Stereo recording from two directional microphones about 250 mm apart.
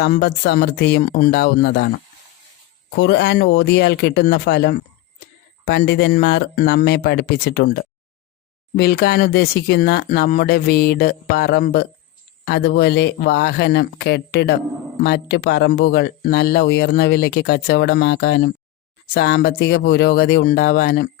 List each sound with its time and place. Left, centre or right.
0.0 s speech: left
2.9 s speech: left